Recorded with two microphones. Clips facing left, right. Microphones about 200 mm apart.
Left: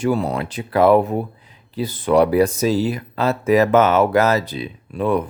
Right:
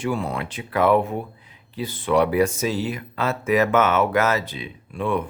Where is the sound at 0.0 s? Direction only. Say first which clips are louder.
Left 5 dB; 40° left (ahead or behind).